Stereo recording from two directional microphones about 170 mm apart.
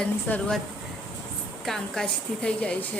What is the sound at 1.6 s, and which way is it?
A woman's voice, 5° left (ahead or behind).